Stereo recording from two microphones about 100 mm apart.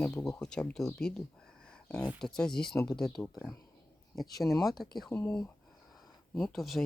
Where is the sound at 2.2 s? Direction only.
5° left (ahead or behind).